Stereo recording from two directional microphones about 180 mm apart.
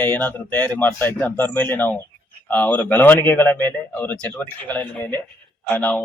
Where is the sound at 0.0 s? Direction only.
10° left (ahead or behind).